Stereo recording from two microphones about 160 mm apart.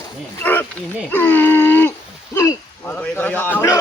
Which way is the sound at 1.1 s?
15° left (ahead or behind).